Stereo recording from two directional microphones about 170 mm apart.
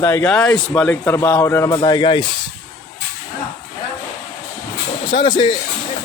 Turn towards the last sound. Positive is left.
turn(degrees=25)  # may be behind; listen again after turning